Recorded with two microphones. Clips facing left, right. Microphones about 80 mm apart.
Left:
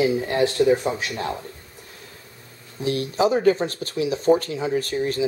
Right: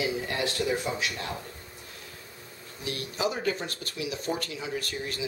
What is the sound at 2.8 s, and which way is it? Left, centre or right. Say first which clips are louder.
Speech: left 10 dB; left.